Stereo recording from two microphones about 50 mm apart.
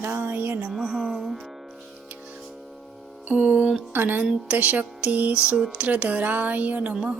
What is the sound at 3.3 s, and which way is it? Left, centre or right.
Speech, centre.